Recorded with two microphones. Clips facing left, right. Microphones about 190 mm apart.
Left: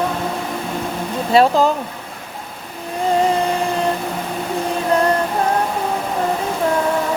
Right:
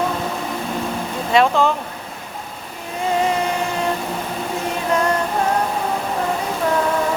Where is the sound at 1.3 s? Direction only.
35° left (ahead or behind).